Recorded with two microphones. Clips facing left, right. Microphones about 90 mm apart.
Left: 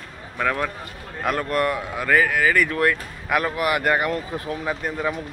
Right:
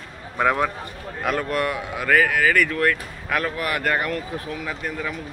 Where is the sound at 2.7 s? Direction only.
15° left (ahead or behind).